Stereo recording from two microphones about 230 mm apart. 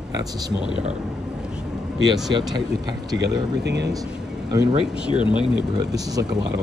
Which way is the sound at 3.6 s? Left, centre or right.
Right.